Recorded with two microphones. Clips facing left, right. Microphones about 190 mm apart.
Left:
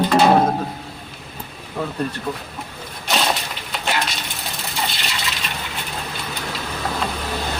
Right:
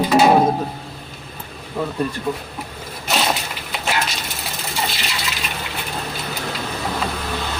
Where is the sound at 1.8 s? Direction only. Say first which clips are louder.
Right 2 dB; 5° right (ahead or behind).